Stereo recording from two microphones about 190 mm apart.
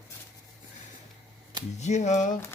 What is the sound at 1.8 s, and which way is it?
Speech, 35° left (ahead or behind).